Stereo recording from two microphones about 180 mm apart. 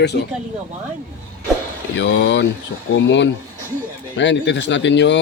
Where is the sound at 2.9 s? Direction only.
90° left.